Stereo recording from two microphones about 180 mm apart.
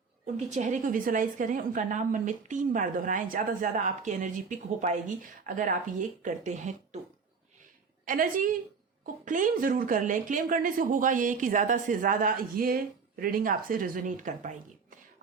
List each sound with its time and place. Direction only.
0.3 s speech: 40° right (ahead or behind)
8.0 s speech: 50° right (ahead or behind)